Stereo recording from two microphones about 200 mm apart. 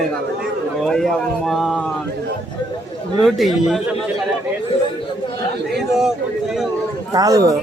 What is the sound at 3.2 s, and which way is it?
Speech, centre (ahead or behind).